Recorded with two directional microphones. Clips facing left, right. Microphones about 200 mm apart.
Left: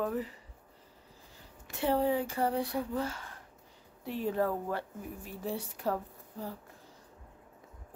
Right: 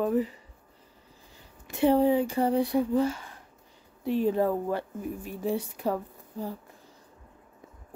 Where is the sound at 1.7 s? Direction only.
15° right (ahead or behind).